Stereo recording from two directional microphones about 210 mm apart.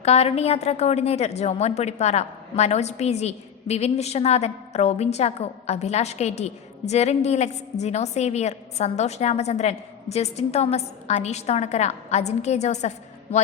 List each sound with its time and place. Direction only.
0.0 s a woman's voice: 30° left (ahead or behind)